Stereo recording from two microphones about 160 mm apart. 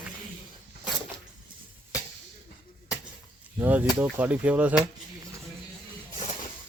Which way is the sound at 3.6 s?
10° right (ahead or behind).